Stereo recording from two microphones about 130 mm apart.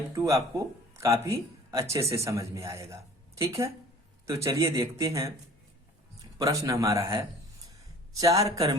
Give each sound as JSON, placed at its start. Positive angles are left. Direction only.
{"t": 0.1, "sound": "speech", "side_deg": -25}
{"t": 6.4, "sound": "speech", "side_deg": -25}